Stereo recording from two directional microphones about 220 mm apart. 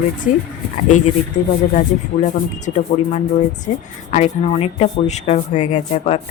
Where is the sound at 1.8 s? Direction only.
35° left (ahead or behind).